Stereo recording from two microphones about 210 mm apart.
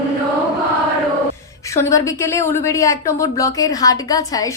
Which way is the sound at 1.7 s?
15° left (ahead or behind).